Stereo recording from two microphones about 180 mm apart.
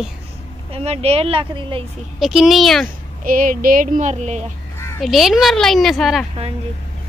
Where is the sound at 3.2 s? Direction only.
50° right (ahead or behind).